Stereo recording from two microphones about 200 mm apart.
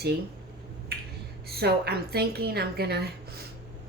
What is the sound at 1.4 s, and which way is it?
A woman's voice, 50° right (ahead or behind).